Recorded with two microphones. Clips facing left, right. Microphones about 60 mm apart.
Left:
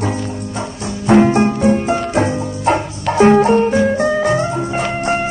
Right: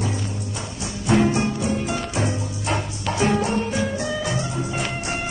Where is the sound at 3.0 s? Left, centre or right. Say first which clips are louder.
Left 12 dB; left.